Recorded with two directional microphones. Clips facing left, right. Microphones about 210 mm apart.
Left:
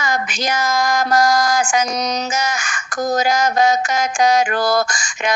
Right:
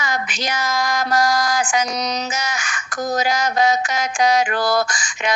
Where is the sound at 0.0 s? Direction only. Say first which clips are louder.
Left 3 dB; 45° left (ahead or behind).